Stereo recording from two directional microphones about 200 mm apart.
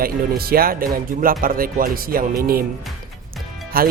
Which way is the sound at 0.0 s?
50° right (ahead or behind).